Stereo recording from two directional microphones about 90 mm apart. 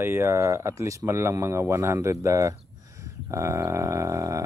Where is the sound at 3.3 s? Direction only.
30° right (ahead or behind).